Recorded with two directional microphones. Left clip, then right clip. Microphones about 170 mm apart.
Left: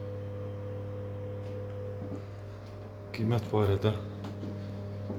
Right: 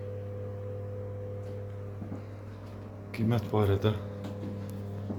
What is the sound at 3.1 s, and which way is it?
Speech, centre (ahead or behind).